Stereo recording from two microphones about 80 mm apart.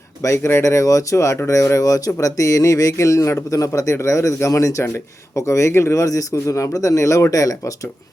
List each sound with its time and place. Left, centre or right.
0.2 s speech: left